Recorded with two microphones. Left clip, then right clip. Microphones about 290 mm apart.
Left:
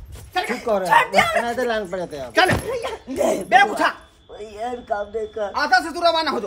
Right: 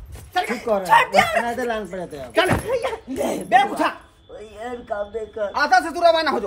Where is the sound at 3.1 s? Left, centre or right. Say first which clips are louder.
Left 8 dB; left.